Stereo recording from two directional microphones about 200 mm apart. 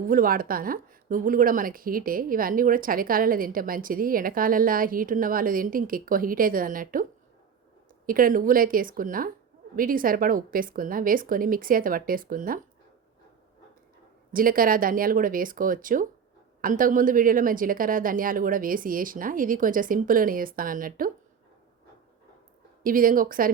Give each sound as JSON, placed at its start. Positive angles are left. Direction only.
{"t": 0.1, "sound": "a woman's voice", "side_deg": -45}
{"t": 8.0, "sound": "a woman's voice", "side_deg": -45}
{"t": 14.3, "sound": "a woman's voice", "side_deg": -45}
{"t": 22.8, "sound": "a woman's voice", "side_deg": -45}